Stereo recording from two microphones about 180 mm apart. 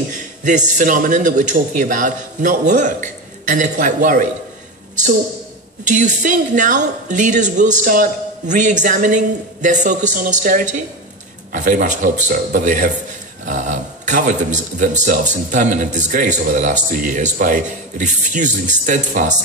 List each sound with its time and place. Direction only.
0.1 s a man's voice: 45° right (ahead or behind)
5.9 s a man's voice: 45° right (ahead or behind)